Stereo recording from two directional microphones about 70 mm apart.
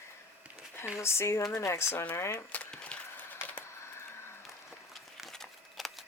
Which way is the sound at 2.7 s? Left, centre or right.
Centre.